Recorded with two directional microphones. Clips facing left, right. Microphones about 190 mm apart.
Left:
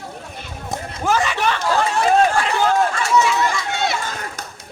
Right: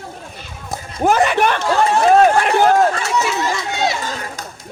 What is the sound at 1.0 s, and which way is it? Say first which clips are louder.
A man's voice: right 6 dB; 55° right (ahead or behind).